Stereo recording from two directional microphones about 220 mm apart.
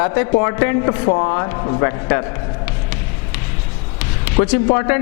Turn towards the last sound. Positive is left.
turn(degrees=20)  # may be behind; listen again after turning